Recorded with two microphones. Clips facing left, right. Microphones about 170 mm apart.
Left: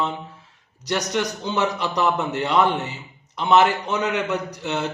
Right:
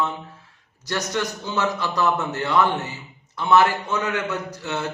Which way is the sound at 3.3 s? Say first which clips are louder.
Left 1 dB; 20° left (ahead or behind).